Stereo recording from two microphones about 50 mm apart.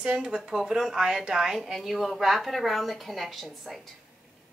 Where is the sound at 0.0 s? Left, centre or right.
Centre.